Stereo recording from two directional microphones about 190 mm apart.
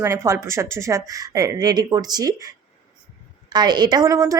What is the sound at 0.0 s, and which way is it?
A woman's voice, 15° right (ahead or behind).